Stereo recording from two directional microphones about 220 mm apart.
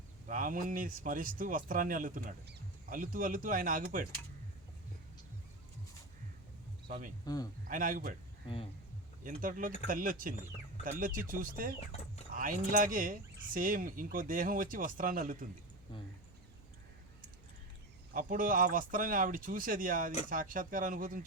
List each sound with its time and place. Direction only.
0.3 s speech: 40° right (ahead or behind)
6.8 s speech: 45° right (ahead or behind)
9.2 s speech: 40° right (ahead or behind)
11.8 s speech: 30° left (ahead or behind)
12.3 s speech: 40° right (ahead or behind)
18.1 s speech: 40° right (ahead or behind)